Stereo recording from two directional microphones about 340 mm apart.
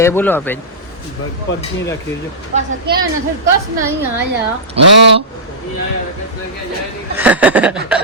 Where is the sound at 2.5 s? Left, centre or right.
Right.